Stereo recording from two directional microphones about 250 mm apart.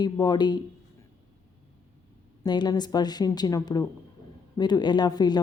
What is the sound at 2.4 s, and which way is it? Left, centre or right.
A woman's voice, centre.